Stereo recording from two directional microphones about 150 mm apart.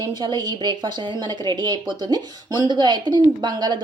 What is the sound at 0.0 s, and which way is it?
Speech, 30° right (ahead or behind).